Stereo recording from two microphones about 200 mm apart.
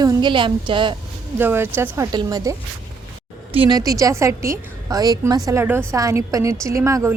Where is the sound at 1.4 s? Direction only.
10° right (ahead or behind).